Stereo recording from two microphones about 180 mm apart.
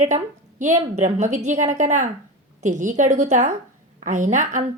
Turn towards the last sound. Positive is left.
turn(degrees=-45)  # may be behind; listen again after turning